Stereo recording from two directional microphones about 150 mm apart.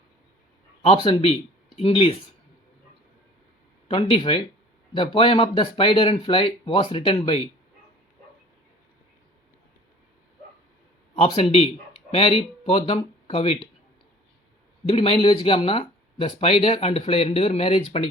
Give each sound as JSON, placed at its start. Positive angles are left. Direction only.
{"t": 0.8, "sound": "speech", "side_deg": 35}
{"t": 3.8, "sound": "speech", "side_deg": 35}
{"t": 11.1, "sound": "a man's voice", "side_deg": 40}
{"t": 14.8, "sound": "speech", "side_deg": 35}